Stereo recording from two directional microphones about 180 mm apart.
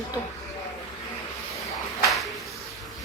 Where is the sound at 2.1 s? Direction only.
Centre (ahead or behind).